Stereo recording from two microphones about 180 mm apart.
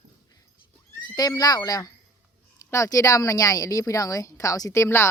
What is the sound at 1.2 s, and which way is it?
Speech, 20° left (ahead or behind).